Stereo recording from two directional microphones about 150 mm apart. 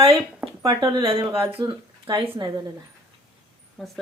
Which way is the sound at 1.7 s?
30° right (ahead or behind).